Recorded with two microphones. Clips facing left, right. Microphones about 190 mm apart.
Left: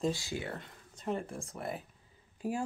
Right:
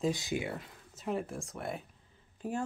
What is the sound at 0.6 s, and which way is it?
Speech, 5° right (ahead or behind).